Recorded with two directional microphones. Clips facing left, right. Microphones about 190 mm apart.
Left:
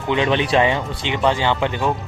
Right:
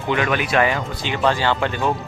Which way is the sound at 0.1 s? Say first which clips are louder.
Left 2 dB; 25° left (ahead or behind).